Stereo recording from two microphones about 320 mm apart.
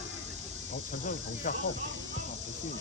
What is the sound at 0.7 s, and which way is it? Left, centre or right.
Speech, left.